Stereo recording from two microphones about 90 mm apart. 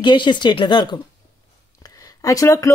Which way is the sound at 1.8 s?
40° left (ahead or behind).